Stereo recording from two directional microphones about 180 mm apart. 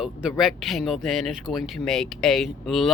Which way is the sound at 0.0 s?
5° right (ahead or behind).